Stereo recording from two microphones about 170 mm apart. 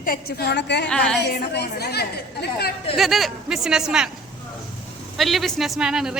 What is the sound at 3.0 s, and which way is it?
A woman's voice, centre (ahead or behind).